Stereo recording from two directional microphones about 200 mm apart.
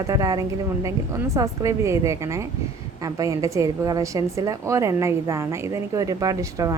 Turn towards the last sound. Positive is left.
turn(degrees=-15)  # may be behind; listen again after turning